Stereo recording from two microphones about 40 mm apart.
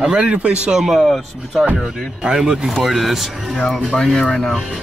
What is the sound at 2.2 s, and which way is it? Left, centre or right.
Speech, centre.